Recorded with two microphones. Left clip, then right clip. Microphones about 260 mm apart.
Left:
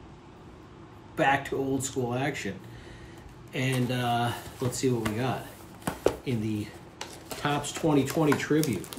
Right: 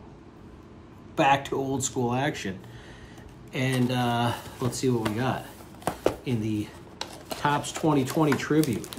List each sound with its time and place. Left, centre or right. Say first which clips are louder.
1.1 s speech: right 3 dB; right
3.5 s speech: right 3 dB; centre